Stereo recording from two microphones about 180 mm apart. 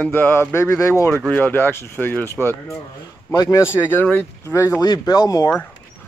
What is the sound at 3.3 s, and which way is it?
Speech, 20° left (ahead or behind).